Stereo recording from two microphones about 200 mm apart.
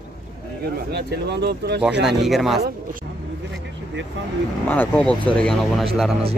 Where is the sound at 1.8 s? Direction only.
5° right (ahead or behind).